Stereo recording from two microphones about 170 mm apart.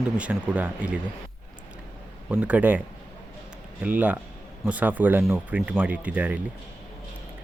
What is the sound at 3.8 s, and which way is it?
Speech, 10° right (ahead or behind).